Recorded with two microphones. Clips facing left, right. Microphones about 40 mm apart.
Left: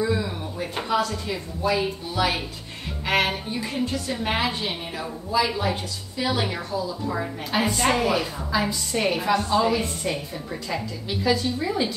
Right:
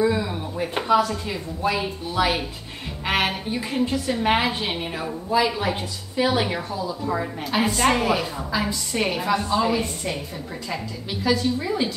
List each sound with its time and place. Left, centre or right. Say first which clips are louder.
0.0 s a sound: right 3 dB; centre
1.1 s speech: even; centre
1.6 s a woman's voice: left 1 dB; right
3.1 s a woman's voice: even; centre
7.2 s a woman's voice: even; centre